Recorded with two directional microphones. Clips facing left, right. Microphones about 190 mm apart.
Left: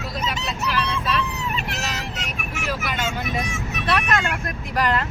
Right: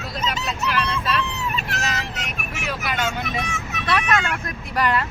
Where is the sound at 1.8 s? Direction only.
Centre (ahead or behind).